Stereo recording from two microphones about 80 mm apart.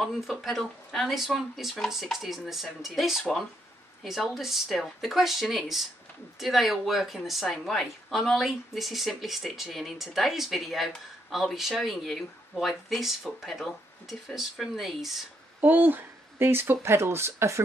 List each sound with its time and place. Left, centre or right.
0.0 s a woman's voice: centre
15.6 s speech: right